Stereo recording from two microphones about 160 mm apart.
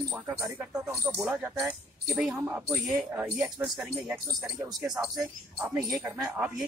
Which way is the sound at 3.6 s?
Centre (ahead or behind).